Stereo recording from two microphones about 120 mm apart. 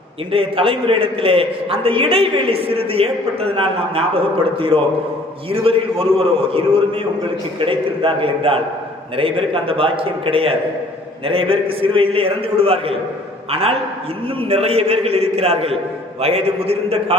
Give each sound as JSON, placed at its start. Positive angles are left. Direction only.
{"t": 0.3, "sound": "a man's voice", "side_deg": -50}
{"t": 5.5, "sound": "a man's voice", "side_deg": -50}